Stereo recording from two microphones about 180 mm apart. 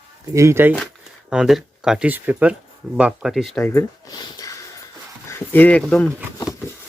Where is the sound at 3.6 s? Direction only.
15° left (ahead or behind).